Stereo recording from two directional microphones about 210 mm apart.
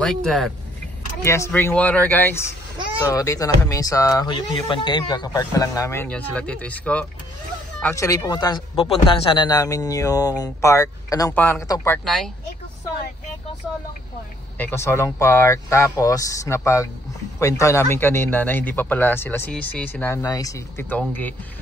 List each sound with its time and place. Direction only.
0.0 s speech: 5° left (ahead or behind)
1.2 s speech: 15° left (ahead or behind)
12.0 s speech: centre (ahead or behind)
14.6 s speech: 10° left (ahead or behind)